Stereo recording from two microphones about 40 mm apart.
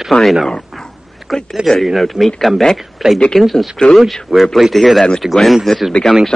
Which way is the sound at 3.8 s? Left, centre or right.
Left.